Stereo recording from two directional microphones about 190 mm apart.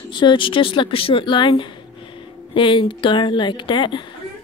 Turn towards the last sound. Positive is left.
turn(degrees=25)  # may be behind; listen again after turning